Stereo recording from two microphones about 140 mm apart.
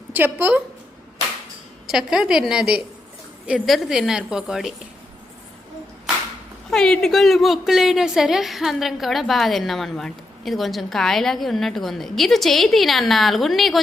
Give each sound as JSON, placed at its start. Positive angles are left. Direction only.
{"t": 0.1, "sound": "a woman's voice", "side_deg": -15}
{"t": 1.9, "sound": "a woman's voice", "side_deg": -5}
{"t": 6.7, "sound": "a woman's voice", "side_deg": 5}